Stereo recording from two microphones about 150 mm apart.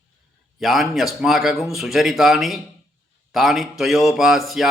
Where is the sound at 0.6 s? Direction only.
Centre (ahead or behind).